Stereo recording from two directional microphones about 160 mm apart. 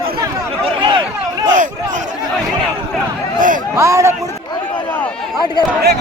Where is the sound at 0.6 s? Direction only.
30° right (ahead or behind).